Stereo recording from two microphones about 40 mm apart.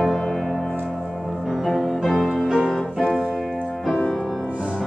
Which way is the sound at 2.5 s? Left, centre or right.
Centre.